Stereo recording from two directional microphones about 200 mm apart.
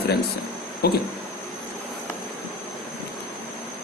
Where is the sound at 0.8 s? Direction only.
50° left (ahead or behind).